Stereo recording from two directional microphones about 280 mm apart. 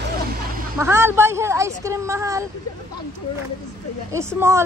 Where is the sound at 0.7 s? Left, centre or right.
Centre.